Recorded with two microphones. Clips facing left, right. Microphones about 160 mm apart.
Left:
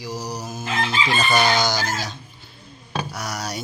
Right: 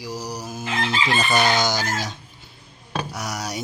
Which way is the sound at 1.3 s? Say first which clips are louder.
Left 1 dB; 20° right (ahead or behind).